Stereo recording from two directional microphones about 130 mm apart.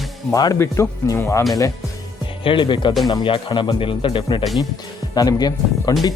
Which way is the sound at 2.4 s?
40° left (ahead or behind).